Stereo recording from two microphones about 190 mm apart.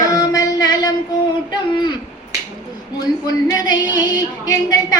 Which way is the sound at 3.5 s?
20° left (ahead or behind).